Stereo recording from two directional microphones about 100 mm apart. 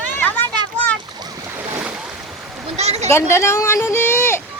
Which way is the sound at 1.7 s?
15° right (ahead or behind).